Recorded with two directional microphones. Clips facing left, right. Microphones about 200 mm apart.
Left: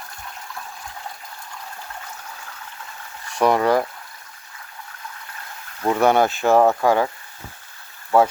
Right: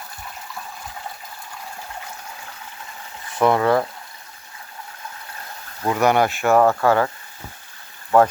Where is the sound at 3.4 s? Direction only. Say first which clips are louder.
Even; 15° left (ahead or behind).